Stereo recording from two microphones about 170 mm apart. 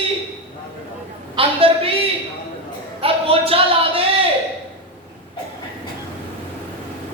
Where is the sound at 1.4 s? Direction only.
35° right (ahead or behind).